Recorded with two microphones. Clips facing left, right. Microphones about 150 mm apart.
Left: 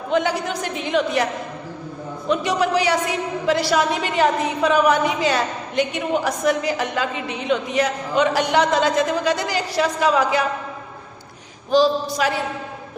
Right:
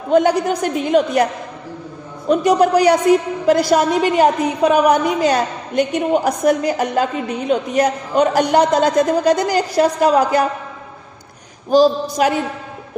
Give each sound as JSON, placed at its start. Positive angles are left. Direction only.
{"t": 0.1, "sound": "a woman's voice", "side_deg": -45}
{"t": 11.7, "sound": "a woman's voice", "side_deg": -45}